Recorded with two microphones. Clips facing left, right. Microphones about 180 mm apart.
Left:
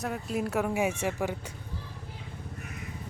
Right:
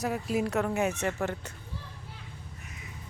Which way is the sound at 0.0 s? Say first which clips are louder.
Right 2 dB; centre (ahead or behind).